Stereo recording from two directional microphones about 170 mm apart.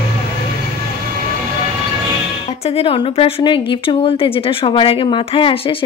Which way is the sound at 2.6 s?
35° left (ahead or behind).